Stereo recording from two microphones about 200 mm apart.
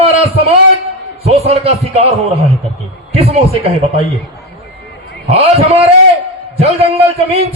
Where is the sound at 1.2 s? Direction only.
30° right (ahead or behind).